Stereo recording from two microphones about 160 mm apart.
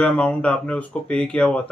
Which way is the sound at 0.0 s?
5° left (ahead or behind).